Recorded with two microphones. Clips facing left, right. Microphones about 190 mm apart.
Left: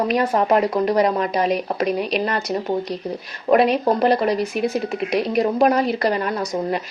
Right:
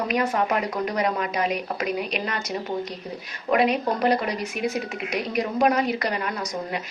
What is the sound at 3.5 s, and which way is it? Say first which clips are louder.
A woman's voice: left 5 dB; 35° left (ahead or behind).